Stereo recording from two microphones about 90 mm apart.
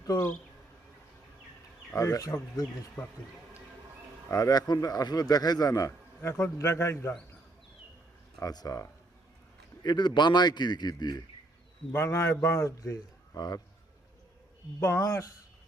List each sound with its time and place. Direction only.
0.0 s speech: 40° left (ahead or behind)
2.0 s a man's voice: 40° left (ahead or behind)
3.0 s speech: 15° left (ahead or behind)
4.3 s speech: 45° left (ahead or behind)
6.2 s a man's voice: 35° left (ahead or behind)
8.4 s a man's voice: 45° left (ahead or behind)
9.8 s speech: 55° left (ahead or behind)
11.9 s a man's voice: 30° left (ahead or behind)
14.8 s a man's voice: 35° left (ahead or behind)